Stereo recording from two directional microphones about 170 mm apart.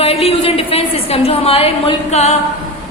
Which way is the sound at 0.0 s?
35° left (ahead or behind).